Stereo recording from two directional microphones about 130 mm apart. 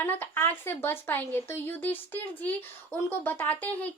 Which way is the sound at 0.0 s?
15° left (ahead or behind).